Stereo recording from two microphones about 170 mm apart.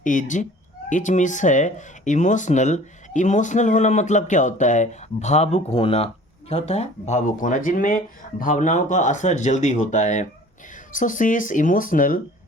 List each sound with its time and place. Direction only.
0.0 s speech: 50° left (ahead or behind)